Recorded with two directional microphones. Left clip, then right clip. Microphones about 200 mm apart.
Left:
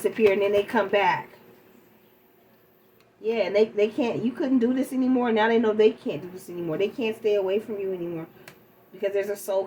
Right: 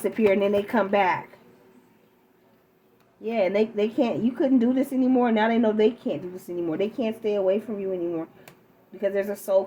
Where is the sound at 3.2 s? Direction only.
50° right (ahead or behind).